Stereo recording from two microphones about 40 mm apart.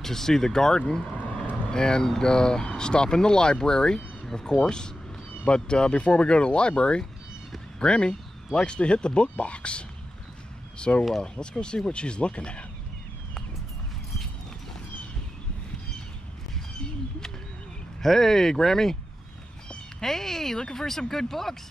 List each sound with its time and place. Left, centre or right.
0.0 s speech: centre
1.1 s vehicle: left
1.7 s speech: centre
18.0 s speech: centre
20.0 s speech: centre